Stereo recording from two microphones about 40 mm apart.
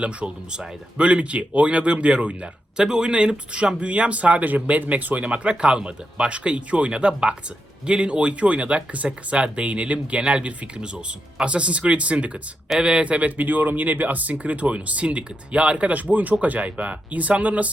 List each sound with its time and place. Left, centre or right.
0.0 s speech: right